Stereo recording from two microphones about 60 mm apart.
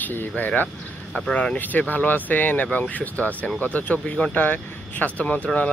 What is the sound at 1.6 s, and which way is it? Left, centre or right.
Speech, left.